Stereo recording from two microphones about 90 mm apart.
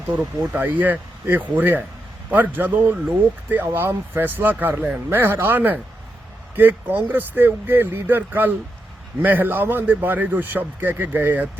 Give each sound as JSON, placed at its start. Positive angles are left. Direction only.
{"t": 0.5, "sound": "speech", "side_deg": -20}